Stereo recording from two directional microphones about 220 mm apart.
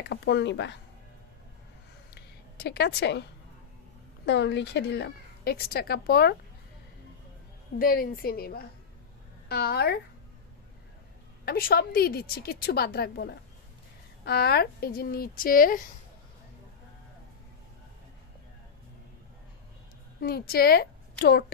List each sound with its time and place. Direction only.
0.1 s speech: 50° left (ahead or behind)
2.1 s a sound: 50° left (ahead or behind)
4.3 s speech: 50° left (ahead or behind)
7.8 s speech: 40° left (ahead or behind)
11.4 s speech: 45° left (ahead or behind)
20.2 s a woman's voice: 45° left (ahead or behind)